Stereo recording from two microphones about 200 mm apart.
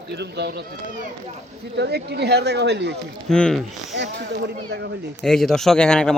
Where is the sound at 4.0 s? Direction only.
60° right (ahead or behind).